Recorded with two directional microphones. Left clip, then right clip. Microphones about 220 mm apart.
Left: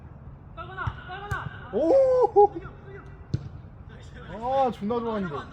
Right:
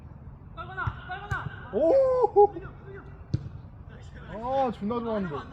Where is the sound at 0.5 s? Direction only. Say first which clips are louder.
Even; 25° right (ahead or behind).